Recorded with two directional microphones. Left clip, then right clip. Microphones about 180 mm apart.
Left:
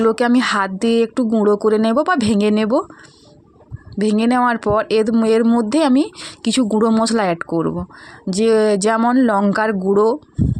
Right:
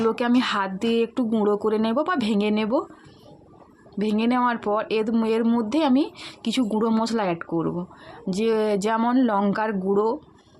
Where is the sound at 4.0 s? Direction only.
40° left (ahead or behind).